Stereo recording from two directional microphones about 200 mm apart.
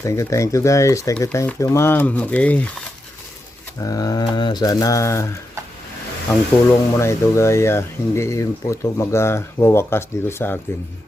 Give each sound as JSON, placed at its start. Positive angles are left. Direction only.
{"t": 0.0, "sound": "speech", "side_deg": 15}
{"t": 3.8, "sound": "speech", "side_deg": 15}
{"t": 6.9, "sound": "speech", "side_deg": 15}